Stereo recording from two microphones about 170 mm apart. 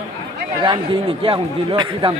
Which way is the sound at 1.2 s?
30° right (ahead or behind).